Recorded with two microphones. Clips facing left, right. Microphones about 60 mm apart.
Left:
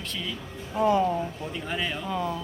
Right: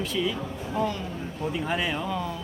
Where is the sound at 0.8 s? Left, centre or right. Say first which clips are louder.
Left 7 dB; centre.